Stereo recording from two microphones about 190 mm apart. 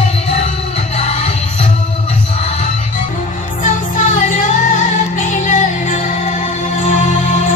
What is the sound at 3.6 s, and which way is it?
Music, 40° left (ahead or behind).